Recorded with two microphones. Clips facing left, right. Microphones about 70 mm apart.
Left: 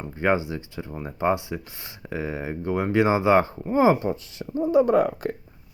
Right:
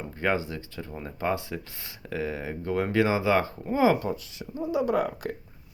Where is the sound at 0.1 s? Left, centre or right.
Centre.